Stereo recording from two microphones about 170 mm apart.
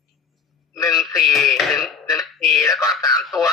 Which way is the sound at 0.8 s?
Centre (ahead or behind).